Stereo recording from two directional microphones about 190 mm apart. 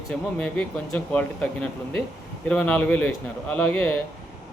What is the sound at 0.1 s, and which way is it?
Speech, 5° left (ahead or behind).